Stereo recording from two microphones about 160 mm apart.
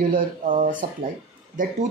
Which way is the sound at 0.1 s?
55° right (ahead or behind).